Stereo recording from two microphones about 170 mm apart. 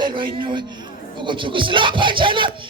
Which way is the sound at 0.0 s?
30° right (ahead or behind).